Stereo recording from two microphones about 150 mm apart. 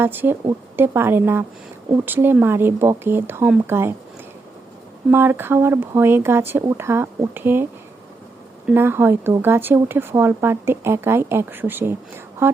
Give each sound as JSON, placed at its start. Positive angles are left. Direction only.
{"t": 0.0, "sound": "speech", "side_deg": -15}
{"t": 5.1, "sound": "speech", "side_deg": -15}
{"t": 8.7, "sound": "speech", "side_deg": -15}